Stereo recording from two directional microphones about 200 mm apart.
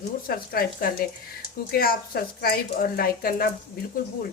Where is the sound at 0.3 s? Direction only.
45° left (ahead or behind).